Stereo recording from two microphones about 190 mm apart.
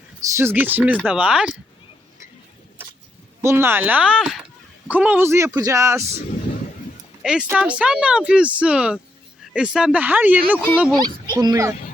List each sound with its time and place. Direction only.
0.2 s speech: 15° right (ahead or behind)
3.4 s speech: 15° right (ahead or behind)
7.2 s speech: 5° right (ahead or behind)
9.4 s a sound: 5° right (ahead or behind)
9.7 s speech: 5° right (ahead or behind)
11.3 s speech: 20° right (ahead or behind)